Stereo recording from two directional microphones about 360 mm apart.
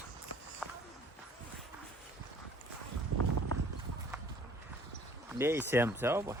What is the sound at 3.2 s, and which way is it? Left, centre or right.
Clip-clop, right.